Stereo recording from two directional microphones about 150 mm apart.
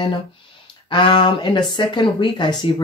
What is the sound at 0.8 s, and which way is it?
Speech, 35° left (ahead or behind).